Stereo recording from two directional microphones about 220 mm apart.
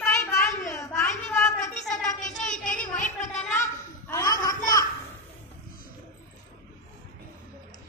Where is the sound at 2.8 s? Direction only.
35° left (ahead or behind).